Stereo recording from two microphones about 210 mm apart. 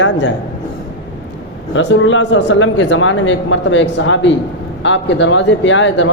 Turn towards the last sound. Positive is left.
turn(degrees=60)  # may be behind; listen again after turning